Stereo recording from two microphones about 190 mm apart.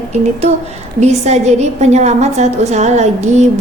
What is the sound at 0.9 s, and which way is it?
A woman's voice, 35° right (ahead or behind).